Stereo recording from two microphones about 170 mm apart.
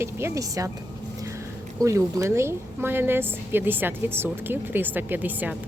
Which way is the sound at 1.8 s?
20° right (ahead or behind).